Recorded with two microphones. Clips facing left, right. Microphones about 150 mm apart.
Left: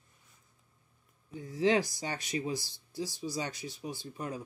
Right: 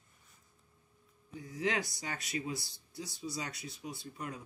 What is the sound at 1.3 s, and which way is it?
Speech, 25° left (ahead or behind).